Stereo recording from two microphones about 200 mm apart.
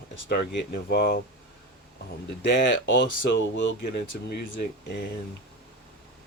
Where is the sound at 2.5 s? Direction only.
65° left (ahead or behind).